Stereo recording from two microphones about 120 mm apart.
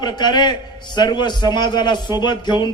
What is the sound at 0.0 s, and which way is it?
A man's voice, 35° left (ahead or behind).